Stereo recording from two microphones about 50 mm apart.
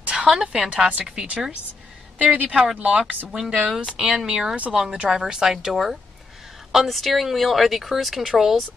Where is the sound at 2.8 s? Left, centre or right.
Right.